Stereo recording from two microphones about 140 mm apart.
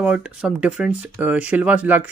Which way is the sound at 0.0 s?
5° right (ahead or behind).